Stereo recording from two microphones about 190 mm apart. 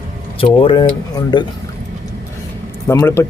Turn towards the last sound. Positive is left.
turn(degrees=15)  # may be behind; listen again after turning